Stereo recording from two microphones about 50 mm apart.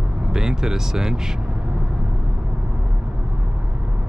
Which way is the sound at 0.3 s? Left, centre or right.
Centre.